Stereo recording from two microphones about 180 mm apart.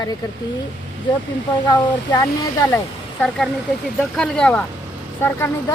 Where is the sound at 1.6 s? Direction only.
25° left (ahead or behind).